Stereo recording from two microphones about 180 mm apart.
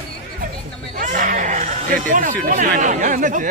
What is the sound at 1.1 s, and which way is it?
Speech, 45° right (ahead or behind).